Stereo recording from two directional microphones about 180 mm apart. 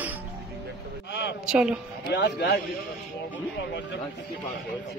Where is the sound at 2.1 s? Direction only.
65° left (ahead or behind).